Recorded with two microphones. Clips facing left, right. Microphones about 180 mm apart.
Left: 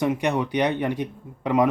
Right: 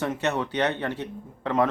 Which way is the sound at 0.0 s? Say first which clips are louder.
Left 4 dB; 15° left (ahead or behind).